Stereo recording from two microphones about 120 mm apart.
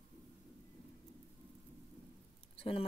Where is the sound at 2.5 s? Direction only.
50° left (ahead or behind).